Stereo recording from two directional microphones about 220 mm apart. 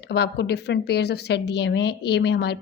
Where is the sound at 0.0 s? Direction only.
50° left (ahead or behind).